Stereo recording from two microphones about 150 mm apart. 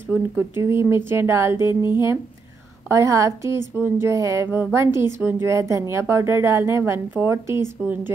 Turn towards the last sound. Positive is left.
turn(degrees=-5)  # may be behind; listen again after turning